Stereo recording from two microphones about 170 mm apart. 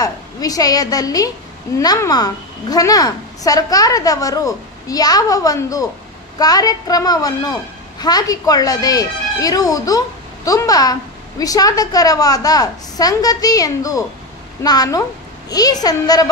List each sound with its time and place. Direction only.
0.0 s speech: 20° left (ahead or behind)